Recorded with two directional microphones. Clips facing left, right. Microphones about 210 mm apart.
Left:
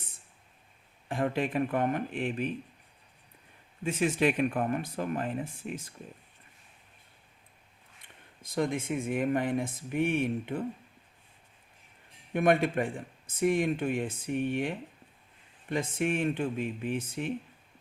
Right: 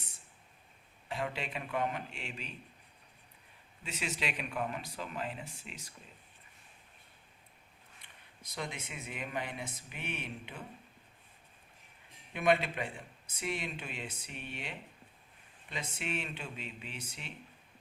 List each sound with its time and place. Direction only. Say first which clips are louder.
1.0 s speech: left 9 dB; 50° left (ahead or behind)
3.8 s speech: left 12 dB; 50° left (ahead or behind)
8.4 s speech: left 12 dB; 50° left (ahead or behind)
12.3 s speech: left 5 dB; 50° left (ahead or behind)